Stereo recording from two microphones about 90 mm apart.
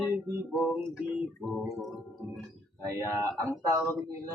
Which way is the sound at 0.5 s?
Centre (ahead or behind).